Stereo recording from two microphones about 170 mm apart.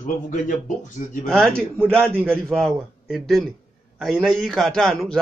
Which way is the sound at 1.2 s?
5° left (ahead or behind).